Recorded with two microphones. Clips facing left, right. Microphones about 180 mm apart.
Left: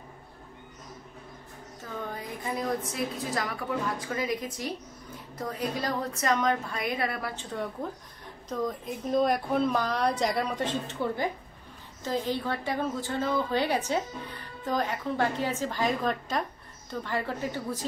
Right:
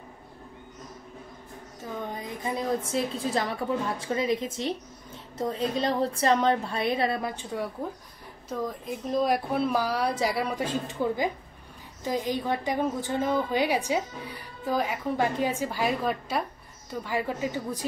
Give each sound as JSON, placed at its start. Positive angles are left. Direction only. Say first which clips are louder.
{"t": 2.0, "sound": "a woman's voice", "louder": "right 2 dB", "side_deg": -20}
{"t": 7.8, "sound": "a woman's voice", "louder": "right 1 dB", "side_deg": -10}